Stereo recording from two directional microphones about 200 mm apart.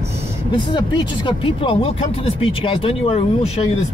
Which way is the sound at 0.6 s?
25° left (ahead or behind).